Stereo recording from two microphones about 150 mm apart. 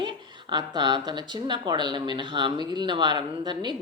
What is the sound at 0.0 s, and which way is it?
Speech, 30° right (ahead or behind).